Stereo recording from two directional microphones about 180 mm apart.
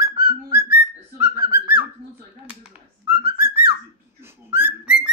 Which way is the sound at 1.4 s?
25° left (ahead or behind).